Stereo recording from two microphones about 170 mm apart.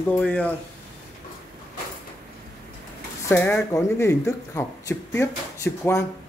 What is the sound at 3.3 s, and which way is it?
Speech, 10° left (ahead or behind).